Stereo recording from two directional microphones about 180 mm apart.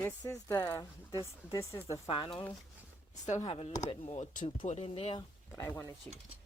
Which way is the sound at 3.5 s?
35° left (ahead or behind).